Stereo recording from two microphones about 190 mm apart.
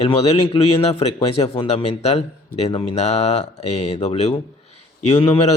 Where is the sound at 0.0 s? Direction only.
30° left (ahead or behind).